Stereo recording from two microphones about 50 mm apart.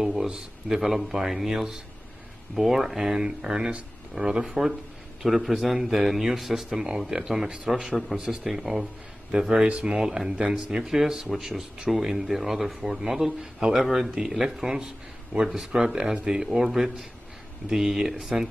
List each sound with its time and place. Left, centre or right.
0.0 s speech: centre
4.5 s a man's voice: centre
7.8 s speech: centre
9.3 s a man's voice: centre
9.9 s speech: centre